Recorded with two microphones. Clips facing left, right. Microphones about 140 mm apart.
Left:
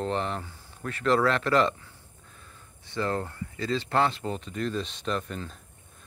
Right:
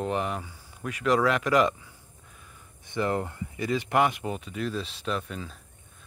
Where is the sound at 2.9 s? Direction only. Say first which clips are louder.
Right 2 dB; 20° right (ahead or behind).